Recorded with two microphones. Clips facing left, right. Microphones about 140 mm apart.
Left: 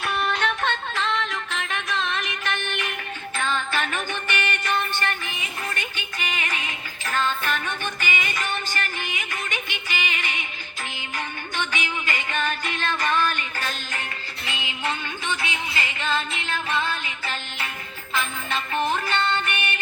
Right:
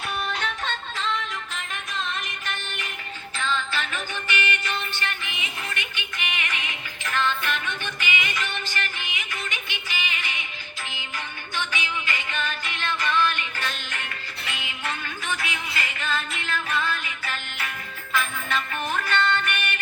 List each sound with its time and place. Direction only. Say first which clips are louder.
0.0 s music: left 4 dB; 70° left (ahead or behind)
3.3 s music: left 2 dB; 50° left (ahead or behind)
11.5 s music: left 1 dB; 50° left (ahead or behind)
14.5 s music: left 4 dB; 30° left (ahead or behind)